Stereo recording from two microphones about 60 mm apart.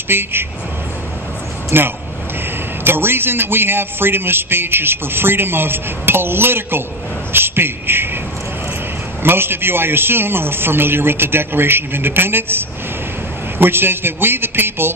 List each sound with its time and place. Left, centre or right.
0.1 s a man's voice: right
1.7 s a man's voice: right
9.2 s a man's voice: right